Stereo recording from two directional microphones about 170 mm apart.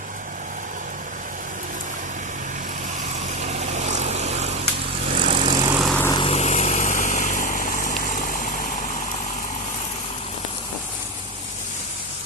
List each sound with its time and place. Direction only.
3.4 s vehicle: 40° right (ahead or behind)
5.7 s vehicle: centre (ahead or behind)
6.1 s vehicle: 35° left (ahead or behind); by 8.7 s 55° left (ahead or behind)